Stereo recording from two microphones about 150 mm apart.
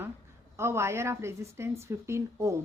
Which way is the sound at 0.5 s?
15° right (ahead or behind).